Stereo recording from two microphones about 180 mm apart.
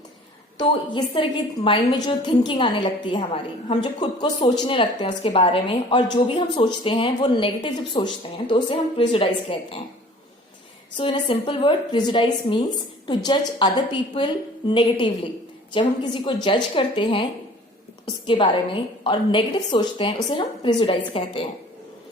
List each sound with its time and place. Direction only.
0.6 s a woman's voice: 25° left (ahead or behind)
10.9 s a woman's voice: 25° left (ahead or behind)
18.3 s a woman's voice: 30° left (ahead or behind)